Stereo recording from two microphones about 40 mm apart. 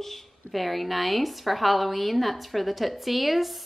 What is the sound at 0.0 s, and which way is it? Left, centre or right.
A woman's voice, centre.